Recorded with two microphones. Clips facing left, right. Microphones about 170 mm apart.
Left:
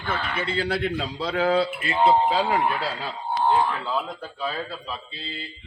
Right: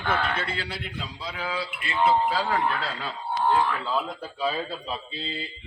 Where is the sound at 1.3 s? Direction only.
65° left (ahead or behind).